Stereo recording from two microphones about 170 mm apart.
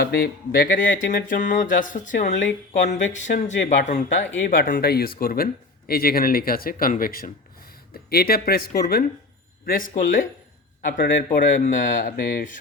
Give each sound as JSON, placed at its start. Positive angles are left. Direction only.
{"t": 0.0, "sound": "speech", "side_deg": 60}
{"t": 4.4, "sound": "speech", "side_deg": 55}